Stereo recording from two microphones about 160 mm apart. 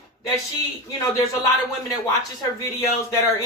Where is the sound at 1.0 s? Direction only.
20° left (ahead or behind).